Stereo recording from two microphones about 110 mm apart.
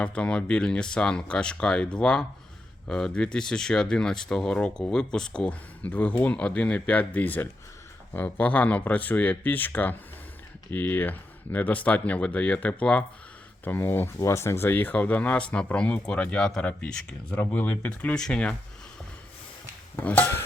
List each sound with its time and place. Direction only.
0.0 s speech: 10° left (ahead or behind)
20.0 s speech: 15° left (ahead or behind)